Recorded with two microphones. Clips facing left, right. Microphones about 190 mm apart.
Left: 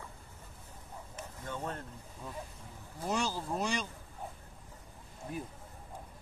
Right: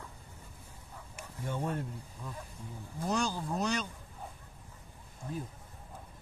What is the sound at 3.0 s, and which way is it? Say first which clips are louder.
Speech: right 1 dB; 5° left (ahead or behind).